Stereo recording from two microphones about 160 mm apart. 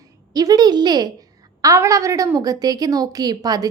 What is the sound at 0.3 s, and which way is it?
A woman's voice, 25° right (ahead or behind).